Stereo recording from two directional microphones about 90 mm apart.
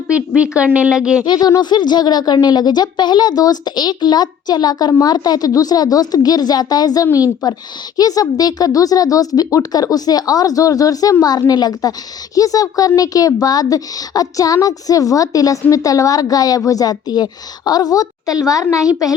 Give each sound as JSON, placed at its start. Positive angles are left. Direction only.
{"t": 0.1, "sound": "speech", "side_deg": -10}
{"t": 1.2, "sound": "a woman's voice", "side_deg": 50}